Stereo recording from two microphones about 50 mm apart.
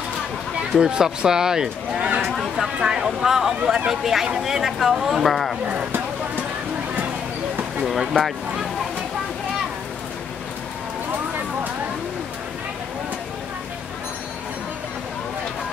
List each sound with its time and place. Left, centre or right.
0.7 s speech: centre
7.8 s speech: centre
11.1 s a sound: right